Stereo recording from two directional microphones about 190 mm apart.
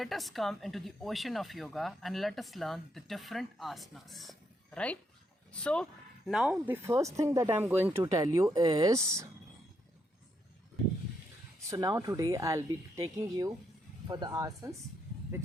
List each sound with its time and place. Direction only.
0.0 s speech: centre (ahead or behind)
6.8 s speech: 15° right (ahead or behind)
11.6 s speech: 20° right (ahead or behind)